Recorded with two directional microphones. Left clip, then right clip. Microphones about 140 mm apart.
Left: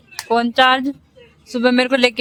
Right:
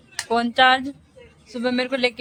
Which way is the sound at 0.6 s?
50° left (ahead or behind).